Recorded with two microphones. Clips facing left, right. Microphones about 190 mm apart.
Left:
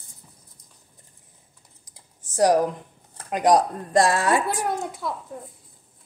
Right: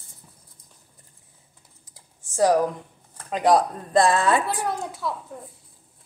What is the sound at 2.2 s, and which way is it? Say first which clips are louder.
Speech: left 1 dB; 15° left (ahead or behind).